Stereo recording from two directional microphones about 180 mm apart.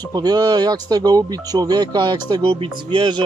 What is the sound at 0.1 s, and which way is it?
Speech, 20° right (ahead or behind).